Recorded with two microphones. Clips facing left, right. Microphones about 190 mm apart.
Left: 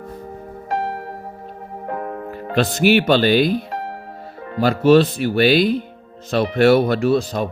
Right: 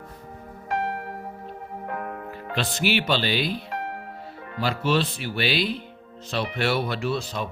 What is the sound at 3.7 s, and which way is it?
Music, 35° left (ahead or behind).